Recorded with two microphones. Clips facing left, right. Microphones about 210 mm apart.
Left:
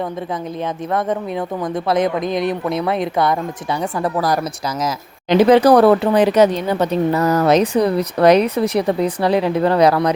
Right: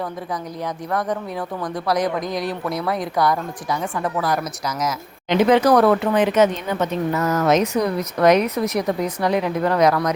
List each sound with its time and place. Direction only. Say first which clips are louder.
1.6 s speech: left 3 dB; 25° left (ahead or behind)